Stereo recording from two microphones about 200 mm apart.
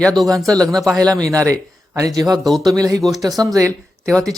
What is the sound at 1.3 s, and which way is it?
Speech, 15° right (ahead or behind).